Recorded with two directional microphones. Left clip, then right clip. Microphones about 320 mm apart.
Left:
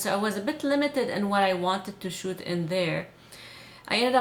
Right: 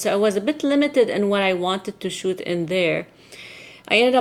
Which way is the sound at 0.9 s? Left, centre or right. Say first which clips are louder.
Right 7 dB; left.